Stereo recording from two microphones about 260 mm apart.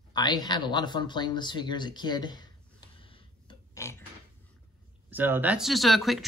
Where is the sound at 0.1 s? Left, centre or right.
Centre.